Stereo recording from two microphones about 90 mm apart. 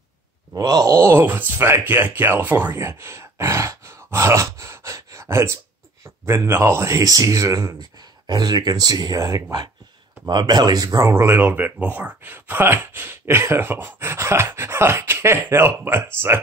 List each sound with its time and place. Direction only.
0.6 s speech: 45° right (ahead or behind); by 2.7 s 20° right (ahead or behind)
2.7 s sigh: 30° right (ahead or behind)
6.2 s speech: 30° right (ahead or behind); by 11.0 s 45° right (ahead or behind)
11.0 s speech: 30° right (ahead or behind)